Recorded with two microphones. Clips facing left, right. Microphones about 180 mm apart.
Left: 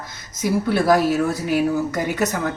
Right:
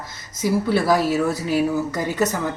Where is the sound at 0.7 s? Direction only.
5° right (ahead or behind).